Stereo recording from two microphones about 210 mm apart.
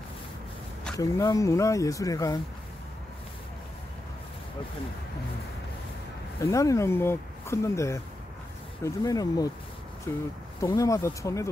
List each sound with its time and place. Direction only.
0.9 s speech: 15° left (ahead or behind)
6.4 s speech: 15° left (ahead or behind)